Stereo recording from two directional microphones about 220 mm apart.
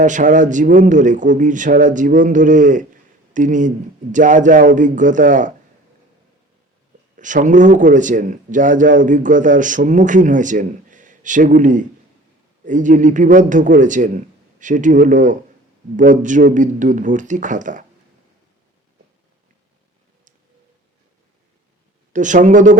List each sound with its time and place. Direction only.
0.0 s a man's voice: 35° right (ahead or behind)
7.2 s a man's voice: 35° right (ahead or behind)
22.1 s a man's voice: 35° right (ahead or behind)